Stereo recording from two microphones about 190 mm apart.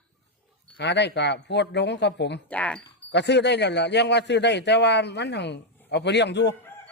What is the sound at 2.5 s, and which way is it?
Speech, 5° left (ahead or behind).